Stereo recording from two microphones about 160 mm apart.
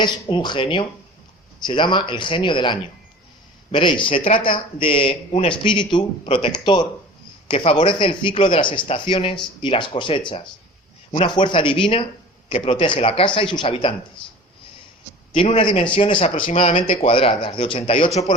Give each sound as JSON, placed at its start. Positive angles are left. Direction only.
{"t": 0.0, "sound": "speech", "side_deg": 30}
{"t": 15.5, "sound": "speech", "side_deg": 35}